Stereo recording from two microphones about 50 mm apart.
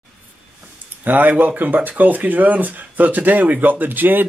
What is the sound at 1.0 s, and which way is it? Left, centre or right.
Speech, right.